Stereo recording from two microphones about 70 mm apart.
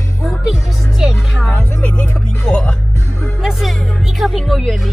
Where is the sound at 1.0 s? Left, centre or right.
Centre.